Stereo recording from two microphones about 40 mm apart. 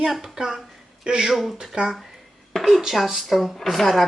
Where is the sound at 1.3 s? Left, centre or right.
Centre.